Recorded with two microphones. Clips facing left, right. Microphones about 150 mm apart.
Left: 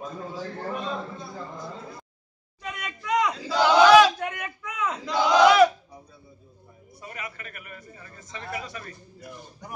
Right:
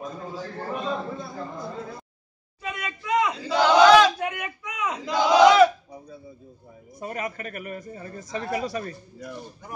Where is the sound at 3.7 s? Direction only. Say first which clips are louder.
Even; 10° left (ahead or behind).